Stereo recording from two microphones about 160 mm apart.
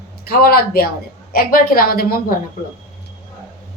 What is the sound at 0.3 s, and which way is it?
A woman's voice, 70° left (ahead or behind).